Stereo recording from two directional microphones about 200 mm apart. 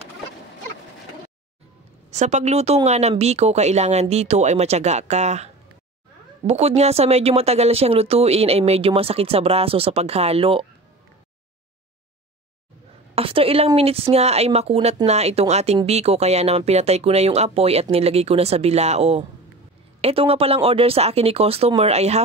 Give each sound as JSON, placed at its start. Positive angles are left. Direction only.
{"t": 2.0, "sound": "speech", "side_deg": -35}
{"t": 13.1, "sound": "speech", "side_deg": -30}